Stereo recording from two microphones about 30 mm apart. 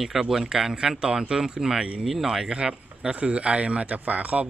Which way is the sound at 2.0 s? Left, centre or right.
Centre.